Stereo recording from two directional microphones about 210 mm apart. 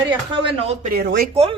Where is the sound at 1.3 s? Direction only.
30° right (ahead or behind).